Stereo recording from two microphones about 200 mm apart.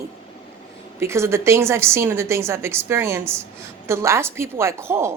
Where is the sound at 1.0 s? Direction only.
15° right (ahead or behind).